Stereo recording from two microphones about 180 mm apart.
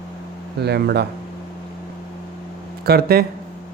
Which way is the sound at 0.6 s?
65° right (ahead or behind).